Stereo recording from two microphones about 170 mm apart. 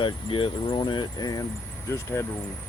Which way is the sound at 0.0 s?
30° left (ahead or behind).